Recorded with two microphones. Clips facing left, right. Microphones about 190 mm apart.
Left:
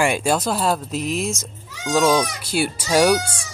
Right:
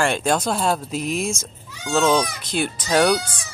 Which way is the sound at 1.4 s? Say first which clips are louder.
Left 3 dB; 10° left (ahead or behind).